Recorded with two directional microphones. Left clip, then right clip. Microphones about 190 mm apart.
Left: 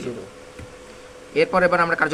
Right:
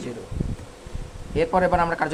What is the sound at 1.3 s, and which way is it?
Speech, 20° right (ahead or behind).